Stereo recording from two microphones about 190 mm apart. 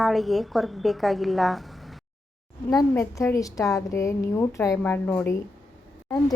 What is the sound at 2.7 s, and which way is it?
A woman's voice, 20° left (ahead or behind).